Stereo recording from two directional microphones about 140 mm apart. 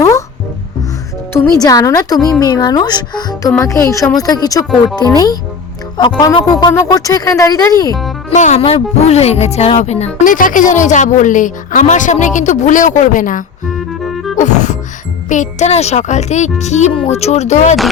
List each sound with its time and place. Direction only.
1.3 s speech: 25° left (ahead or behind)
6.0 s speech: 30° left (ahead or behind)
8.4 s speech: 50° left (ahead or behind)
10.2 s a woman's voice: 75° left (ahead or behind)
14.0 s music: centre (ahead or behind)
14.3 s music: 60° left (ahead or behind)
15.3 s a woman's voice: 60° left (ahead or behind)
16.9 s speech: 45° left (ahead or behind)